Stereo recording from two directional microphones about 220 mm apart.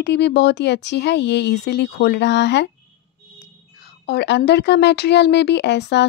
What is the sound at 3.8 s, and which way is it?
A woman's voice, 50° left (ahead or behind).